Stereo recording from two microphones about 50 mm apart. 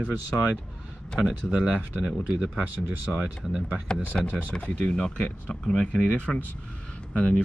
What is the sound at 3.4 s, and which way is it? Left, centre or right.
Speech, centre.